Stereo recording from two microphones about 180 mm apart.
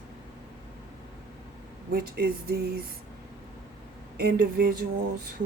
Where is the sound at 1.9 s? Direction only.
60° right (ahead or behind).